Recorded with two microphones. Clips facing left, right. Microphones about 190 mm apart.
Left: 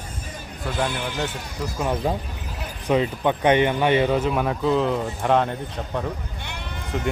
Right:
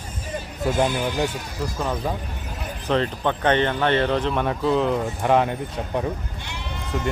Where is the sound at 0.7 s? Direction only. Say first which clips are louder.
Right 3 dB; 20° right (ahead or behind).